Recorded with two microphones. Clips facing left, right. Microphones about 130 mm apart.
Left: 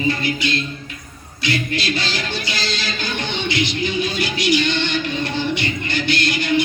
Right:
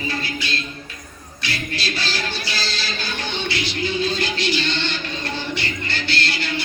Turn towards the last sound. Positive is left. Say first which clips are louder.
# left 6 dB
turn(degrees=15)  # may be behind; listen again after turning